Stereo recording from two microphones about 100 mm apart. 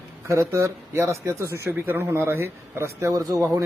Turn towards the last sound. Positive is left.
turn(degrees=-35)  # may be behind; listen again after turning